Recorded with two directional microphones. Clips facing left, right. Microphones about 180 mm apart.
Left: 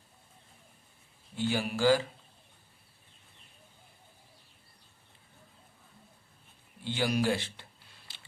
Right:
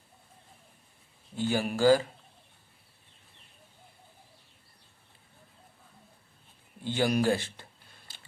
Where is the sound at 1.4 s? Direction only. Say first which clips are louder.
Right 3 dB; 45° right (ahead or behind).